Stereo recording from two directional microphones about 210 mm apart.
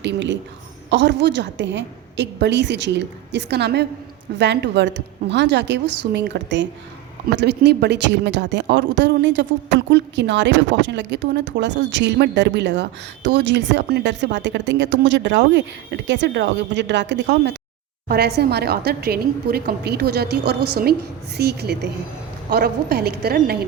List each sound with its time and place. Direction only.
0.0 s a woman's voice: 60° right (ahead or behind)